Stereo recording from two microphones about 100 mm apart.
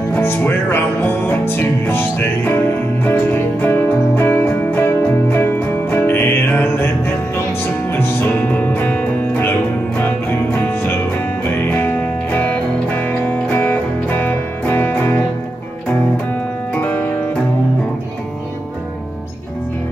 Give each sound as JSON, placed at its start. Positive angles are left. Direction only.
{"t": 0.1, "sound": "music", "side_deg": 20}
{"t": 11.5, "sound": "music", "side_deg": 20}
{"t": 16.7, "sound": "music", "side_deg": 15}